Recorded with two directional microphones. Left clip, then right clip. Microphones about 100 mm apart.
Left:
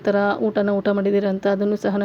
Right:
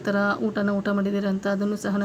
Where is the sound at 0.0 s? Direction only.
45° left (ahead or behind).